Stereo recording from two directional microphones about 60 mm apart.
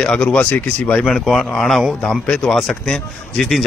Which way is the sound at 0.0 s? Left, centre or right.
Centre.